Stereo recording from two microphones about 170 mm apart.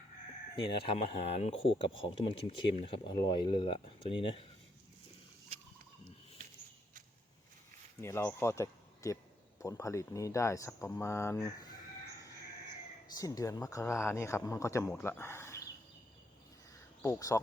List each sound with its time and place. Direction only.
0.5 s speech: 30° left (ahead or behind)
8.0 s speech: 15° left (ahead or behind)
13.1 s speech: 20° left (ahead or behind)
17.0 s speech: 20° left (ahead or behind)